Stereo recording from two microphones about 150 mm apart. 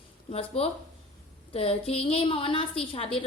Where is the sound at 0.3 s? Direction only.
40° left (ahead or behind).